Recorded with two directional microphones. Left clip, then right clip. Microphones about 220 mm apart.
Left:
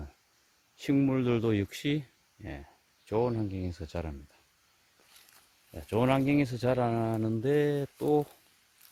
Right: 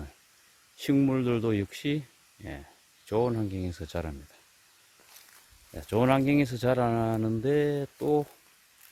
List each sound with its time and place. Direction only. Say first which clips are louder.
0.8 s speech: right 2 dB; centre (ahead or behind)
5.7 s speech: right 3 dB; centre (ahead or behind)